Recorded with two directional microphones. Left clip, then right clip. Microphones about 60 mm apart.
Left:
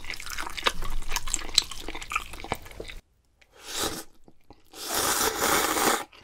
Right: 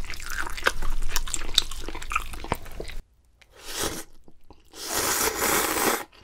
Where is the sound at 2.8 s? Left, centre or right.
Left.